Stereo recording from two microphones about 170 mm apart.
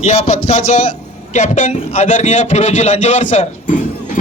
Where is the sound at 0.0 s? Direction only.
40° left (ahead or behind).